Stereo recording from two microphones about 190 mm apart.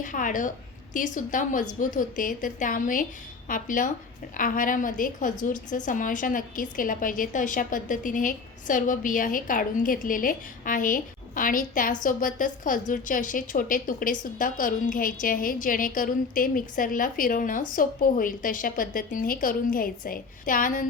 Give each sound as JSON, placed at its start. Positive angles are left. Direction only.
{"t": 0.0, "sound": "a woman's voice", "side_deg": 45}